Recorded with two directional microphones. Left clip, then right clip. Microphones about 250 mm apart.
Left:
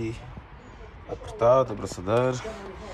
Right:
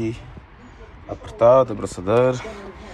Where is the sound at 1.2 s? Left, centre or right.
Centre.